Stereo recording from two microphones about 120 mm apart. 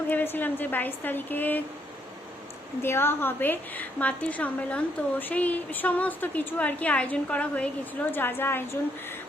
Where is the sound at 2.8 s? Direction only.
20° left (ahead or behind).